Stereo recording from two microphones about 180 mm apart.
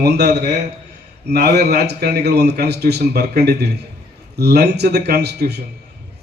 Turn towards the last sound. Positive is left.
turn(degrees=-65)  # may be behind; listen again after turning